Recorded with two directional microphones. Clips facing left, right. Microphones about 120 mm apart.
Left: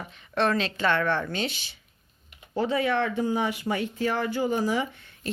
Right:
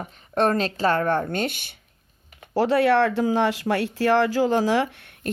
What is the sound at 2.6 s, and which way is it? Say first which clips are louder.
Speech: right 7 dB; 70° right (ahead or behind).